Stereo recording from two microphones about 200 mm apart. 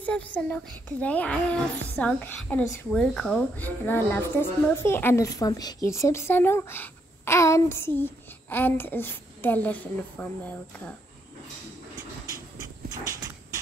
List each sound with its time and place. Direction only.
0.0 s speech: 5° left (ahead or behind)